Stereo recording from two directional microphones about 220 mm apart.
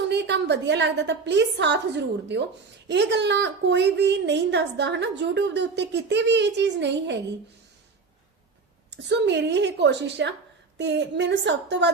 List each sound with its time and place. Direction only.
0.1 s a woman's voice: 50° right (ahead or behind)
8.9 s a woman's voice: 50° right (ahead or behind)